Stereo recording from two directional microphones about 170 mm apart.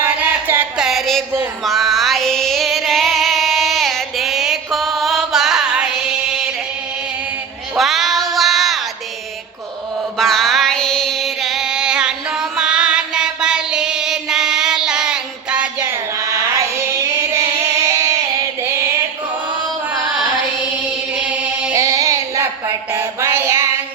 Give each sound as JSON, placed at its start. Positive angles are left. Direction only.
{"t": 0.0, "sound": "a sound", "side_deg": -10}
{"t": 1.6, "sound": "music", "side_deg": 0}
{"t": 7.8, "sound": "child singing", "side_deg": 0}
{"t": 10.2, "sound": "music", "side_deg": 0}
{"t": 21.1, "sound": "chant", "side_deg": -5}
{"t": 21.8, "sound": "music", "side_deg": -20}